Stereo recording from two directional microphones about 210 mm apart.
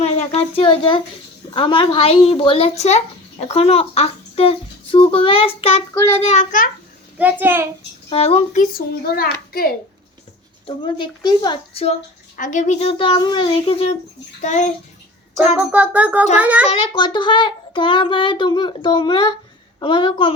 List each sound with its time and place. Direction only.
0.0 s a child's voice: 30° left (ahead or behind)
7.2 s a child's voice: 10° right (ahead or behind)
8.1 s a child's voice: 30° left (ahead or behind)
9.1 s a child's voice: 45° left (ahead or behind)
10.7 s a child's voice: 25° left (ahead or behind)
15.5 s a child's voice: 5° right (ahead or behind)
16.6 s a child's voice: 20° left (ahead or behind)